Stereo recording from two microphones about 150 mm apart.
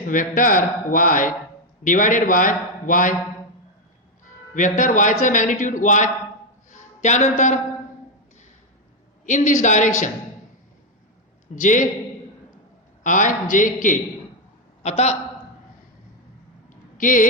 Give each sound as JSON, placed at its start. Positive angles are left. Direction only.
{"t": 0.1, "sound": "a man's voice", "side_deg": 65}
{"t": 4.8, "sound": "a man's voice", "side_deg": 55}
{"t": 6.7, "sound": "a sound", "side_deg": 55}
{"t": 9.2, "sound": "a man's voice", "side_deg": 55}
{"t": 11.5, "sound": "a man's voice", "side_deg": 60}
{"t": 13.0, "sound": "a man's voice", "side_deg": 60}
{"t": 14.8, "sound": "a man's voice", "side_deg": 45}
{"t": 16.6, "sound": "a sound", "side_deg": 60}